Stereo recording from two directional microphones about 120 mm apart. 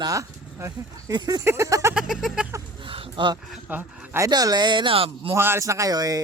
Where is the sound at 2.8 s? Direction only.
45° right (ahead or behind).